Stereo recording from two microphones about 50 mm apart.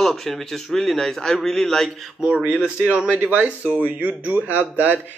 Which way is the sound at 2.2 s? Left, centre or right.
Right.